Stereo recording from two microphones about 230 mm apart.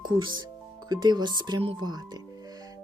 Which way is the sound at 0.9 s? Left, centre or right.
Centre.